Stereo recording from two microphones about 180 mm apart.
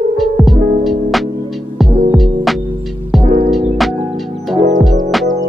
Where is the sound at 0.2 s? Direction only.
Centre (ahead or behind).